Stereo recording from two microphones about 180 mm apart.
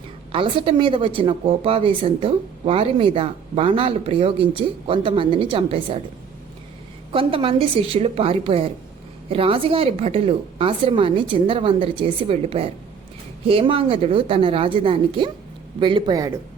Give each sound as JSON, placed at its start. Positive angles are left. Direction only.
{"t": 0.3, "sound": "a woman's voice", "side_deg": -30}
{"t": 7.1, "sound": "a woman's voice", "side_deg": -30}